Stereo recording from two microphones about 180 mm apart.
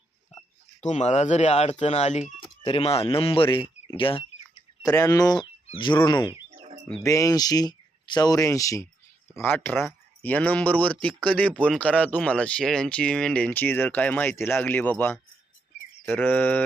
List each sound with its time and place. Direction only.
0.3 s a sound: 40° left (ahead or behind)
0.8 s speech: 40° left (ahead or behind)
4.8 s speech: 20° left (ahead or behind)